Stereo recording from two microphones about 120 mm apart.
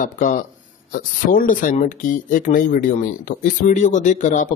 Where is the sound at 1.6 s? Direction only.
90° left.